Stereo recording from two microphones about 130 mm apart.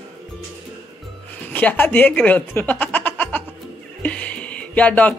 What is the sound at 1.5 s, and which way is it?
Speech, 15° left (ahead or behind).